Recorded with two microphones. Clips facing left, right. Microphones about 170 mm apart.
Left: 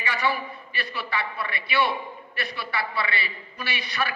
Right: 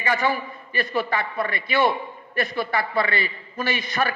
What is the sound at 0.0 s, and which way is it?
A man's voice, 45° right (ahead or behind).